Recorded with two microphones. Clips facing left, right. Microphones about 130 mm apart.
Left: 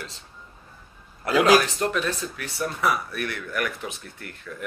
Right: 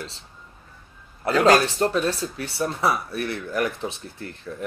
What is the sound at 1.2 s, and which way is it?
Speech, 25° right (ahead or behind).